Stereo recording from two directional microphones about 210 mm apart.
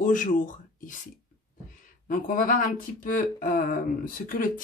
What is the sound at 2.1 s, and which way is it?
Speech, 40° left (ahead or behind).